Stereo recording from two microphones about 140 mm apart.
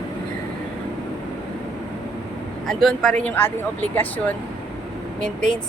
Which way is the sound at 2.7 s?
Centre (ahead or behind).